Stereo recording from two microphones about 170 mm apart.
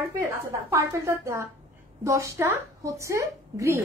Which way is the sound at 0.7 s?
15° right (ahead or behind).